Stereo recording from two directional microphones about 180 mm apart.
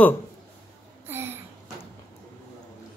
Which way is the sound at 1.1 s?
10° right (ahead or behind).